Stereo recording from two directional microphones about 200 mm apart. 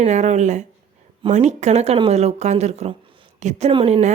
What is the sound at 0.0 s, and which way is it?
Speech, 35° right (ahead or behind).